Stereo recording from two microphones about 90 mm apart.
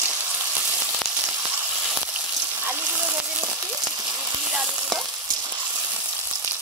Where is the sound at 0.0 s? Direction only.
20° right (ahead or behind).